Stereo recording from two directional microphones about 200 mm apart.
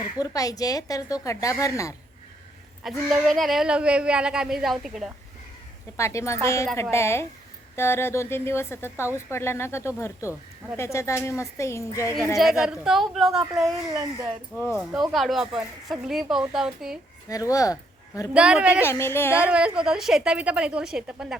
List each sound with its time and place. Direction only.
0.2 s a woman's voice: 15° left (ahead or behind)
2.8 s speech: centre (ahead or behind)
6.0 s a woman's voice: 15° left (ahead or behind)
12.4 s speech: centre (ahead or behind)
13.4 s speech: 15° right (ahead or behind)
15.1 s speech: centre (ahead or behind)
17.2 s speech: 15° left (ahead or behind)
18.3 s speech: 5° right (ahead or behind)
18.9 s a woman's voice: 10° left (ahead or behind)
19.5 s speech: 5° right (ahead or behind)